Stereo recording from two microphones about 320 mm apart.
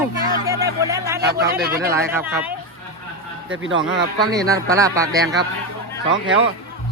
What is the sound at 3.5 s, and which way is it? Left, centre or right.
Speech, right.